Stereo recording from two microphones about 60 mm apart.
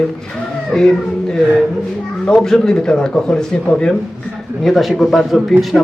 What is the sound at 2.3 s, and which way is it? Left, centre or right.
A man's voice, centre.